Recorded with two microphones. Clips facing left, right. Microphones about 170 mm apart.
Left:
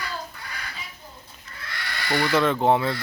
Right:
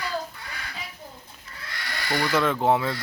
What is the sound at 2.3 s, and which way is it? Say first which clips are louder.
Speech: left 2 dB; 5° right (ahead or behind).